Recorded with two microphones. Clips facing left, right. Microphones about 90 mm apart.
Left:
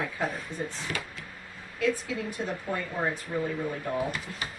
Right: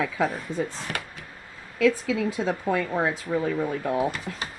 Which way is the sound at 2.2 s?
90° right.